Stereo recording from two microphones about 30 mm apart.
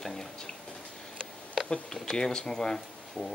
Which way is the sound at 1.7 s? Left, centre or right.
Centre.